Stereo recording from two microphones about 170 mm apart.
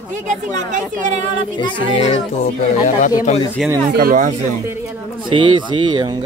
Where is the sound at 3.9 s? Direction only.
55° right (ahead or behind).